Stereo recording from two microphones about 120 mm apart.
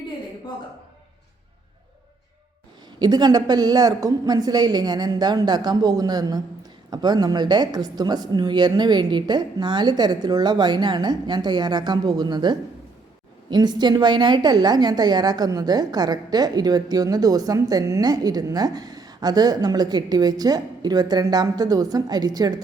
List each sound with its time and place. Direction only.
3.0 s a woman's voice: 35° right (ahead or behind)